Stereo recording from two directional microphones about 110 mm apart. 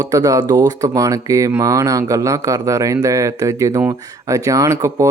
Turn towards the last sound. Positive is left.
turn(degrees=-30)  # may be behind; listen again after turning